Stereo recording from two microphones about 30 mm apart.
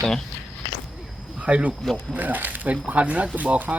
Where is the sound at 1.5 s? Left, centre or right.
Right.